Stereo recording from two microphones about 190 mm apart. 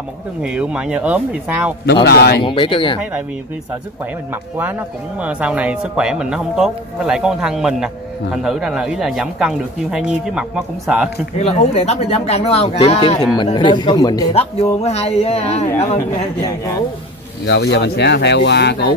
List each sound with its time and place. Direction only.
0.4 s speech: 5° right (ahead or behind)
2.0 s speech: 55° left (ahead or behind)
2.4 s speech: 25° left (ahead or behind)
3.0 s speech: 5° right (ahead or behind)
4.3 s speech: 10° right (ahead or behind)
11.3 s speech: 35° left (ahead or behind)
14.3 s speech: 30° left (ahead or behind)
16.3 s speech: 20° left (ahead or behind)
17.5 s speech: 60° left (ahead or behind)